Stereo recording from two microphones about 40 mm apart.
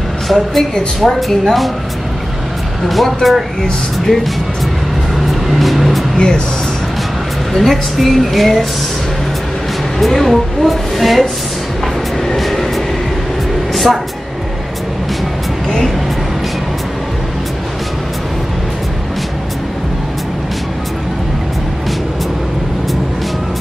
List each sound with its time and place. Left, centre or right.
0.3 s a woman's voice: centre
2.9 s a woman's voice: centre
5.2 s vehicle: centre
6.1 s speech: left
7.5 s a woman's voice: centre
9.9 s a woman's voice: centre
12.3 s vehicle: centre